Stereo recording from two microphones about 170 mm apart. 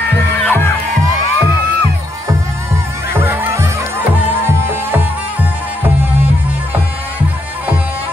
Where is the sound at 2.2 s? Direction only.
15° right (ahead or behind).